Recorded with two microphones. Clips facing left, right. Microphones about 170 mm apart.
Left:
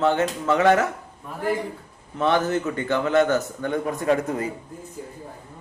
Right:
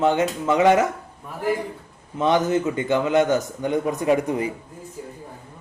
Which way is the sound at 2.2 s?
15° right (ahead or behind).